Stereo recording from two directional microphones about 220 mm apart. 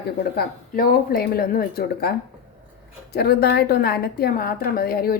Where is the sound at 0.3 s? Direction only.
40° left (ahead or behind).